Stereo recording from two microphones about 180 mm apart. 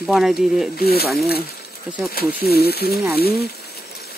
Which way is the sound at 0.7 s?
60° left (ahead or behind).